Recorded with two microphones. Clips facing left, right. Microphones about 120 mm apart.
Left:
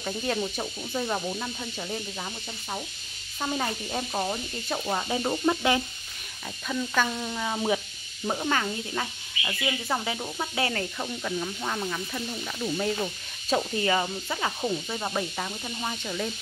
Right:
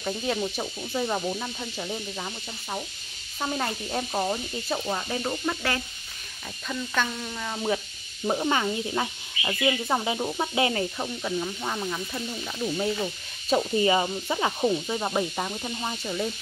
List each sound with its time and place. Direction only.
0.0 s speech: centre (ahead or behind); by 5.8 s 15° left (ahead or behind)
6.7 s speech: 5° left (ahead or behind)
8.5 s speech: 20° right (ahead or behind)